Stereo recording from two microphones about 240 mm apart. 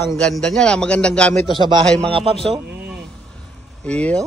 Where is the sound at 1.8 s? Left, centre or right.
Centre.